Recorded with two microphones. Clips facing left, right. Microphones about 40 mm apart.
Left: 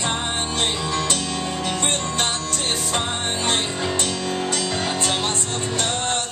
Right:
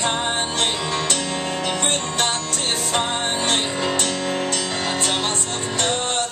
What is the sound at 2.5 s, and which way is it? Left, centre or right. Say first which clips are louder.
Music: right 1 dB; centre.